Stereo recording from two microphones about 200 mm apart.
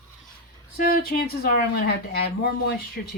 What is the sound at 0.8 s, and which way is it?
Speech, 50° left (ahead or behind).